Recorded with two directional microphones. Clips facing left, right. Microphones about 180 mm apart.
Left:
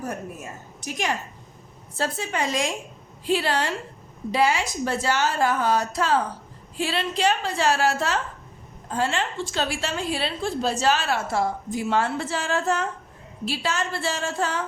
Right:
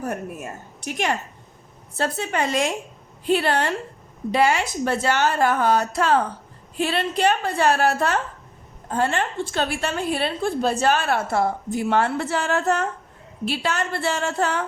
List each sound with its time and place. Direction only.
0.9 s a woman's voice: 60° right (ahead or behind)